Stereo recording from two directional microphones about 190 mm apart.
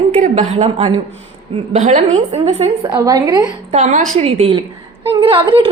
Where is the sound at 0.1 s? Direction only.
40° right (ahead or behind); by 3.5 s 20° right (ahead or behind).